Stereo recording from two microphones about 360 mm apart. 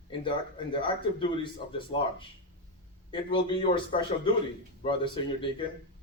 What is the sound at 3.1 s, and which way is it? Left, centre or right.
Speech, centre.